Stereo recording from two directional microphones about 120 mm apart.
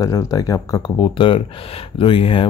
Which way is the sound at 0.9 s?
45° left (ahead or behind).